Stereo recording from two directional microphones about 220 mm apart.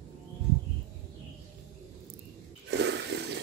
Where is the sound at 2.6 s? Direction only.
50° right (ahead or behind).